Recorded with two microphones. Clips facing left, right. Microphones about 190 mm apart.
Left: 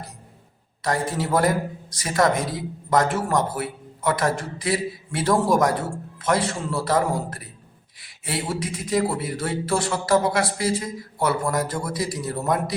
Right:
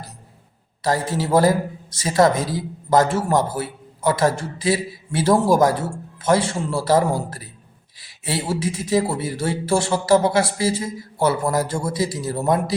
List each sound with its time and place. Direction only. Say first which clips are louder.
0.8 s a man's voice: right 3 dB; 30° right (ahead or behind)